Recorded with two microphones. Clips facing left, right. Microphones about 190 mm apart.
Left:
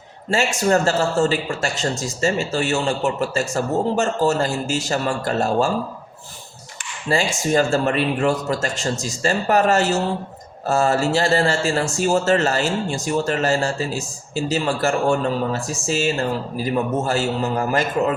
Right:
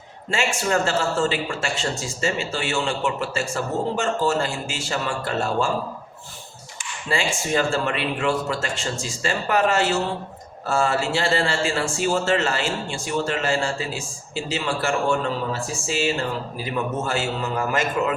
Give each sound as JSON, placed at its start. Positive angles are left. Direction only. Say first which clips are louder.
{"t": 0.3, "sound": "speech", "louder": "left 5 dB", "side_deg": 40}
{"t": 7.1, "sound": "speech", "louder": "left 4 dB", "side_deg": 40}
{"t": 16.6, "sound": "speech", "louder": "left 5 dB", "side_deg": 40}